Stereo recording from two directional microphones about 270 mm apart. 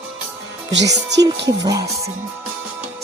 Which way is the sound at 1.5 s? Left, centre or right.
Centre.